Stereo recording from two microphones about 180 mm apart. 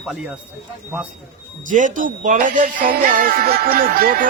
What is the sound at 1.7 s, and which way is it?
Speech, 45° right (ahead or behind).